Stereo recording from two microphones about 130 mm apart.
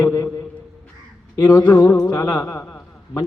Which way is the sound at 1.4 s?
30° left (ahead or behind).